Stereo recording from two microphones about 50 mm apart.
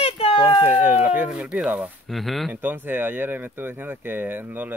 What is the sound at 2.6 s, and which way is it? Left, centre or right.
Speech, right.